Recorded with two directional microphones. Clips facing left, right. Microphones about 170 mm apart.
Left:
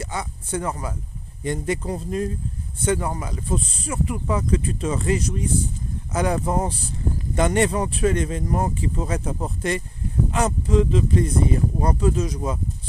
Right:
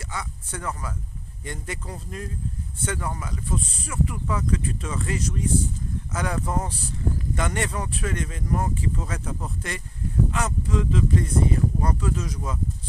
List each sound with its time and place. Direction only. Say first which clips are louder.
0.0 s speech: left 5 dB; 20° left (ahead or behind)